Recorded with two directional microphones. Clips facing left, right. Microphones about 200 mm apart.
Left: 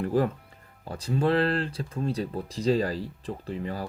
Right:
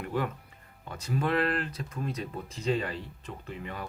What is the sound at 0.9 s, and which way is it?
Speech, 30° left (ahead or behind).